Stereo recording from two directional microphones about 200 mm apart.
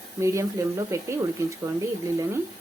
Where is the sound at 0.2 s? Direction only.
15° right (ahead or behind).